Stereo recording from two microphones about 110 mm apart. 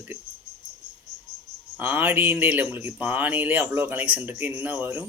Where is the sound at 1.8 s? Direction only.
15° right (ahead or behind).